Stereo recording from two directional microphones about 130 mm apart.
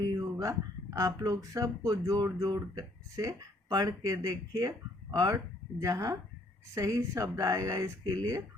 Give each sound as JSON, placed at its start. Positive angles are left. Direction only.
{"t": 0.0, "sound": "speech", "side_deg": -25}